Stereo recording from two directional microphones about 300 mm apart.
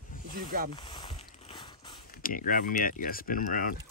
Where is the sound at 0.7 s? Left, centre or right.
Centre.